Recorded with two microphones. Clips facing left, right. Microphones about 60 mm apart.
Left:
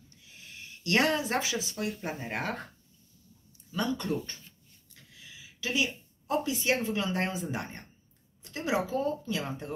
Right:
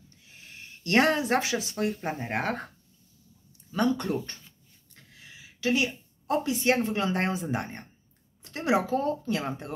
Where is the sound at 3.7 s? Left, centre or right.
Right.